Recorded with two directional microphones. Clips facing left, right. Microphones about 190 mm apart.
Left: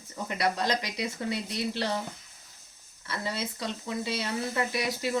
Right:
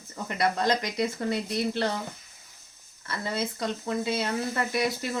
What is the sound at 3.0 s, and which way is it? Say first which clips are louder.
Speech: right 3 dB; 50° right (ahead or behind).